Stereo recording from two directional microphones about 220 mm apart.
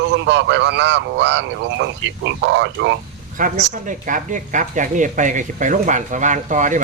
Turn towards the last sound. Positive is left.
turn(degrees=-35)  # may be behind; listen again after turning